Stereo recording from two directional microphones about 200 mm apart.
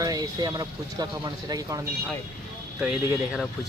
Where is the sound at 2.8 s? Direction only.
5° right (ahead or behind).